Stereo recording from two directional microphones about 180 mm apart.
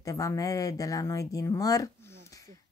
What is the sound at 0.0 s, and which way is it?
Speech, 20° left (ahead or behind).